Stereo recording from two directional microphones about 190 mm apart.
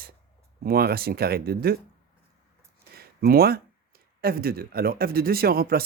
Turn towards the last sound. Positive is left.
turn(degrees=-50)  # may be behind; listen again after turning